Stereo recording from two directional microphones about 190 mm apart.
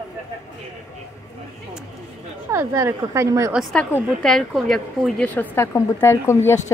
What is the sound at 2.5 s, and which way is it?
Speech, 15° right (ahead or behind).